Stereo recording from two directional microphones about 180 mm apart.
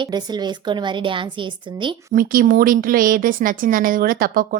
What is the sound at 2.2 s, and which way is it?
Speech, 50° right (ahead or behind).